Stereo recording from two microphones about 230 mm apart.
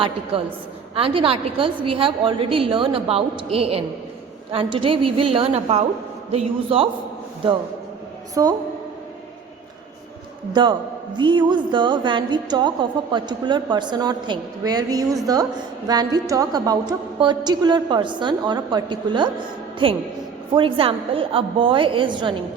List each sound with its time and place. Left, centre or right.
0.0 s music: right
8.4 s a woman's voice: centre
10.5 s music: centre